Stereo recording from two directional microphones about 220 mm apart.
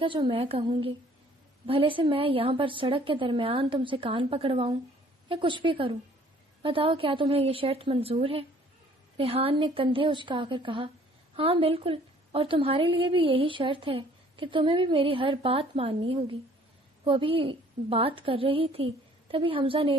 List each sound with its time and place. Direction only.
0.0 s a woman's voice: 20° right (ahead or behind)